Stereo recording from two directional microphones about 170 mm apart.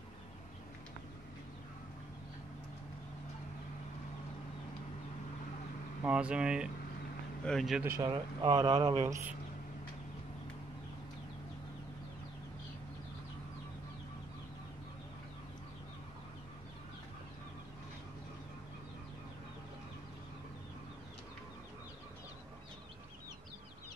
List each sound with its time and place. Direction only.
6.0 s speech: 5° right (ahead or behind)
8.0 s speech: 25° right (ahead or behind)